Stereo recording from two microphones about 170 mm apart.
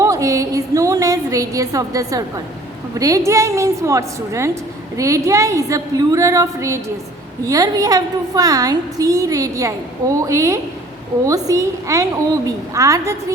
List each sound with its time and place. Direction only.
0.0 s music: 20° right (ahead or behind)
2.9 s a woman's voice: 20° right (ahead or behind)